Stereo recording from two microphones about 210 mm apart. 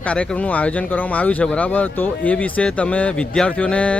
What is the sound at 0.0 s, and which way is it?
Speech, 5° left (ahead or behind).